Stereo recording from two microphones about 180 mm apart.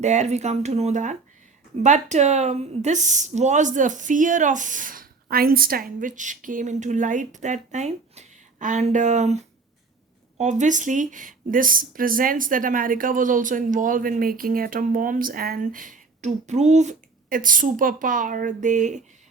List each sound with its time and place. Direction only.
0.0 s speech: 40° right (ahead or behind)